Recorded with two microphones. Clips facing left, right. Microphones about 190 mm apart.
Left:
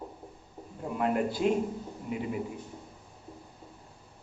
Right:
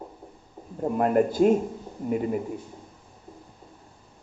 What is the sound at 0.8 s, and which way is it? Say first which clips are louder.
Speech: right 7 dB; 45° right (ahead or behind).